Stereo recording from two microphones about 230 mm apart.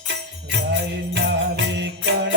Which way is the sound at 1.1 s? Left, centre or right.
Right.